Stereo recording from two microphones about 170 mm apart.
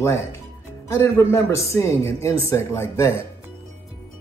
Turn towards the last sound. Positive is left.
turn(degrees=15)  # may be behind; listen again after turning